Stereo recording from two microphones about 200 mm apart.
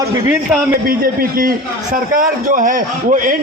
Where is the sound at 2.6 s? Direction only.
40° right (ahead or behind).